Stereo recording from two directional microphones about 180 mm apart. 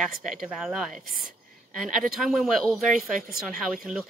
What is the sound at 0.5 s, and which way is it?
Speech, centre (ahead or behind).